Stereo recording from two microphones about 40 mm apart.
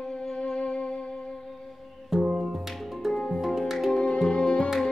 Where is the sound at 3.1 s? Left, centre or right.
Centre.